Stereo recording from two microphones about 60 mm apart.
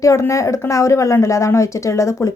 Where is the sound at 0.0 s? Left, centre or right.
Left.